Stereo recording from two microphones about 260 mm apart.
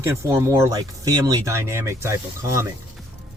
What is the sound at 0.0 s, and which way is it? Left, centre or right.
Speech, centre.